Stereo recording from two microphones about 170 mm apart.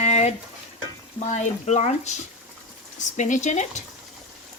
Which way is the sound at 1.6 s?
40° left (ahead or behind).